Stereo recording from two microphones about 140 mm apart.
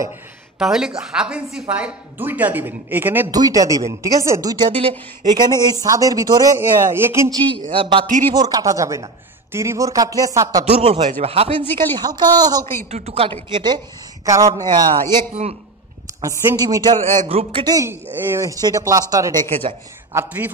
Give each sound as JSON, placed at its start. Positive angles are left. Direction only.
{"t": 0.6, "sound": "a woman's voice", "side_deg": -5}
{"t": 3.3, "sound": "a woman's voice", "side_deg": -25}
{"t": 10.7, "sound": "a man's voice", "side_deg": -40}
{"t": 11.1, "sound": "speech", "side_deg": -50}
{"t": 12.0, "sound": "a woman's voice", "side_deg": -30}
{"t": 12.9, "sound": "speech", "side_deg": -45}
{"t": 14.2, "sound": "a woman's voice", "side_deg": -25}
{"t": 17.3, "sound": "a man's voice", "side_deg": -40}
{"t": 18.1, "sound": "a woman's voice", "side_deg": -15}
{"t": 19.7, "sound": "speech", "side_deg": -45}
{"t": 20.1, "sound": "a woman's voice", "side_deg": -15}